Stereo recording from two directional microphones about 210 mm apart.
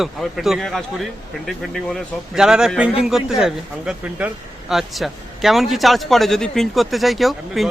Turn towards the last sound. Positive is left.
turn(degrees=0)  # may be behind; listen again after turning